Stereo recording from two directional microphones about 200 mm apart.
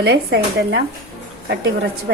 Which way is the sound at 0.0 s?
55° right (ahead or behind).